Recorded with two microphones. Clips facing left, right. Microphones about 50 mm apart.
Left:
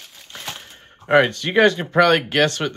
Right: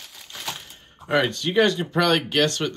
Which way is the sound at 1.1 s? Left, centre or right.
Left.